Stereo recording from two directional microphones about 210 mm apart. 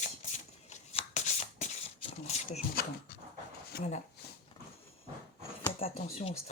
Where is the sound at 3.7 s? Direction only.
50° left (ahead or behind).